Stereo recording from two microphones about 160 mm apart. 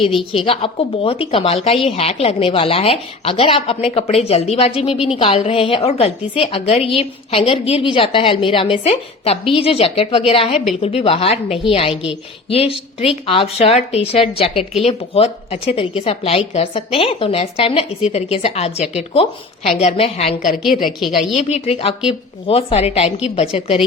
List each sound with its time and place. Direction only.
0.3 s a woman's voice: 35° left (ahead or behind)
20.8 s a woman's voice: centre (ahead or behind)
21.3 s a woman's voice: 40° left (ahead or behind)